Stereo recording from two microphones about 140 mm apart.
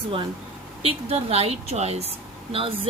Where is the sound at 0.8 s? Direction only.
45° right (ahead or behind).